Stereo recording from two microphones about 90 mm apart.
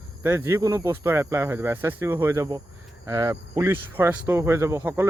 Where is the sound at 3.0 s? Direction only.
35° right (ahead or behind).